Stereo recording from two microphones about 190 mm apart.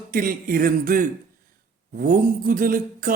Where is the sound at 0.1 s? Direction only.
50° right (ahead or behind).